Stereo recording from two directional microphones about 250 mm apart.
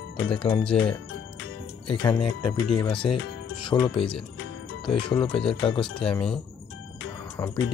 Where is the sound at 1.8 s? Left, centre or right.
Centre.